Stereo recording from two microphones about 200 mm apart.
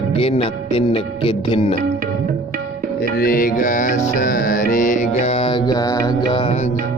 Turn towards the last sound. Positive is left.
turn(degrees=35)  # may be behind; listen again after turning